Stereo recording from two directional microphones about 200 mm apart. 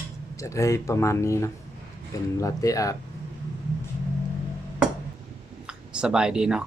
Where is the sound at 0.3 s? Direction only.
15° left (ahead or behind).